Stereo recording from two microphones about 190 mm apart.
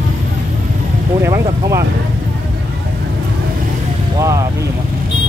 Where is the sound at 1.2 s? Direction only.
15° right (ahead or behind).